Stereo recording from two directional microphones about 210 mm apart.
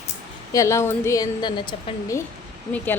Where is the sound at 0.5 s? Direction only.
15° left (ahead or behind).